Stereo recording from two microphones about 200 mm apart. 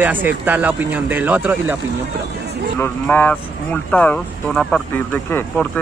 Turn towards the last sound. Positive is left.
turn(degrees=10)  # may be behind; listen again after turning